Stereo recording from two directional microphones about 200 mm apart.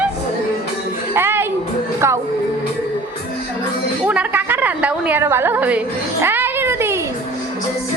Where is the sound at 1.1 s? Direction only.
10° right (ahead or behind).